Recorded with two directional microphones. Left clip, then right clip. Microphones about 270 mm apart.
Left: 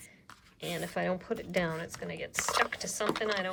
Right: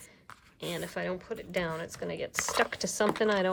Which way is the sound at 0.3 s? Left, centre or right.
Centre.